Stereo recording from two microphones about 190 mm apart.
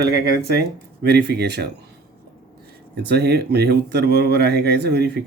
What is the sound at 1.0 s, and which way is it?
Speech, 60° right (ahead or behind).